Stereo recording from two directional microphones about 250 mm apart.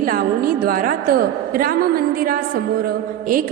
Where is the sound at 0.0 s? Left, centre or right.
Right.